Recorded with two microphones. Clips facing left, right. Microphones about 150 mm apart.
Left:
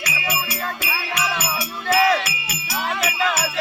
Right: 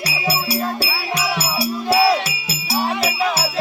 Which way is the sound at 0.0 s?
35° right (ahead or behind).